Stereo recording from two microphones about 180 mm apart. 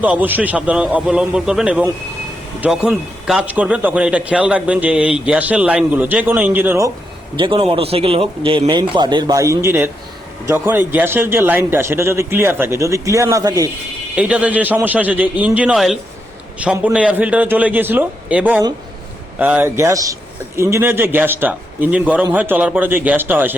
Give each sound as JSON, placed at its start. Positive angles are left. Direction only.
{"t": 0.0, "sound": "a man's voice", "side_deg": -10}
{"t": 7.3, "sound": "a man's voice", "side_deg": -30}
{"t": 14.2, "sound": "a man's voice", "side_deg": -5}